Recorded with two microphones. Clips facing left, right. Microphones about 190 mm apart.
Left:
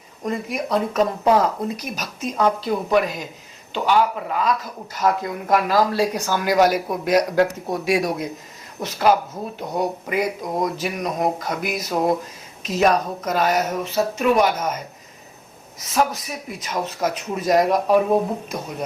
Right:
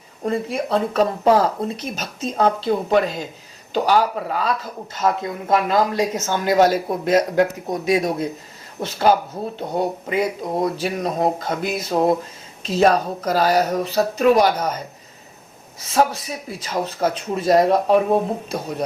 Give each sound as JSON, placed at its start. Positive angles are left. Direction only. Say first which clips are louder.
{"t": 0.2, "sound": "speech", "louder": "right 3 dB", "side_deg": -30}
{"t": 3.7, "sound": "speech", "louder": "right 1 dB", "side_deg": -40}